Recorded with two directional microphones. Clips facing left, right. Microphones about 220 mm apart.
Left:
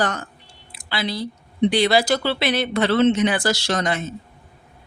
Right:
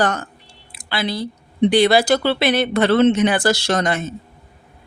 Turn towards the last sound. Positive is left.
turn(degrees=-50)  # may be behind; listen again after turning